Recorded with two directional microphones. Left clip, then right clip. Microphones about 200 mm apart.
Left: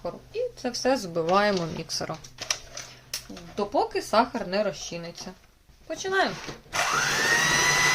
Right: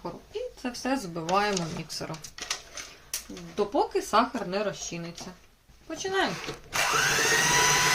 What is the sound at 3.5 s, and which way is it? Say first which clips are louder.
Speech: left 1 dB; 40° left (ahead or behind).